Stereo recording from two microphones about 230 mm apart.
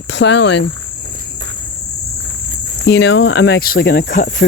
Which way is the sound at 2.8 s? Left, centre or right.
Left.